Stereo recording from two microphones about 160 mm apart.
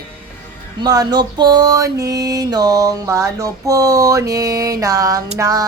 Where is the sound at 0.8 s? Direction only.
25° right (ahead or behind).